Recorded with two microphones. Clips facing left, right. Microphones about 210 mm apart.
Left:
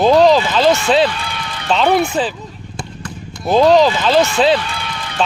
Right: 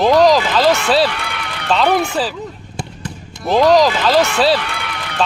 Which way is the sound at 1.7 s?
Centre (ahead or behind).